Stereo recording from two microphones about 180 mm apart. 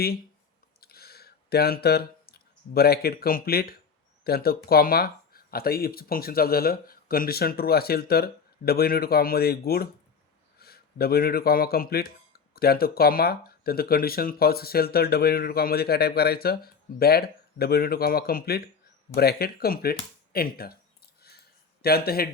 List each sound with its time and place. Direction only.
0.8 s a sound: 60° left (ahead or behind)
4.2 s speech: 60° left (ahead or behind)
21.8 s a man's voice: 60° left (ahead or behind)